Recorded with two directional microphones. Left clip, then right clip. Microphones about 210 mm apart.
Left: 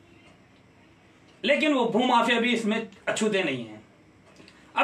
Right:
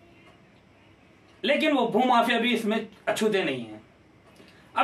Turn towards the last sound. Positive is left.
turn(degrees=-5)  # may be behind; listen again after turning